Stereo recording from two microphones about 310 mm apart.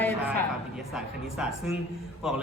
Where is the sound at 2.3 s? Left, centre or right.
Centre.